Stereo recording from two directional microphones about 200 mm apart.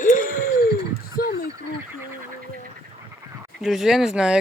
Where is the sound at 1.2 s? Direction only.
50° left (ahead or behind).